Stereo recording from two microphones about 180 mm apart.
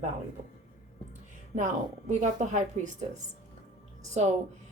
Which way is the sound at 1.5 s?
40° right (ahead or behind).